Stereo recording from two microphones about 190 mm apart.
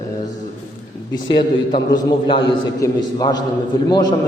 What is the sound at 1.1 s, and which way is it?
A man's voice, 25° left (ahead or behind).